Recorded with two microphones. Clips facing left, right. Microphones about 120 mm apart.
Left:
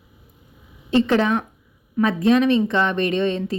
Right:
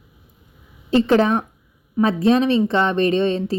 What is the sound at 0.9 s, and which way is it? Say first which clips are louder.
A woman's voice: right 2 dB; 35° right (ahead or behind).